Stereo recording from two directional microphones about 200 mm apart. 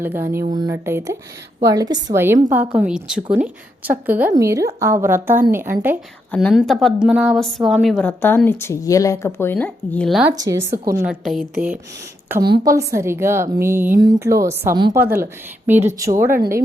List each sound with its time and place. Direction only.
0.0 s a woman's voice: 10° right (ahead or behind)
6.3 s a woman's voice: centre (ahead or behind)
10.3 s a woman's voice: 15° right (ahead or behind)
12.3 s a woman's voice: 20° right (ahead or behind)